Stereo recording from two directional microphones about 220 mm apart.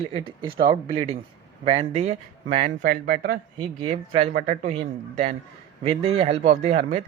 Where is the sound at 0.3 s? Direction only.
25° right (ahead or behind).